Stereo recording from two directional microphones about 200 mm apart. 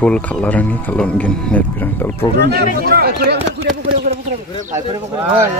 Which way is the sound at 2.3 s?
55° right (ahead or behind).